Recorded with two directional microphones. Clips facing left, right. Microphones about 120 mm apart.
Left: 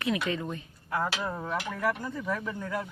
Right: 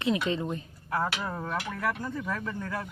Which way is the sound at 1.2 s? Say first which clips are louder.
Left 1 dB; 10° left (ahead or behind).